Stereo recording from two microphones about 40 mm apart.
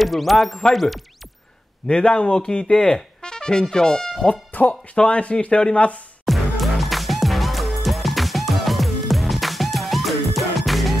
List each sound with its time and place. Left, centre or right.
0.0 s speech: centre
1.9 s speech: left
4.2 s speech: left
4.9 s speech: left
6.2 s music: centre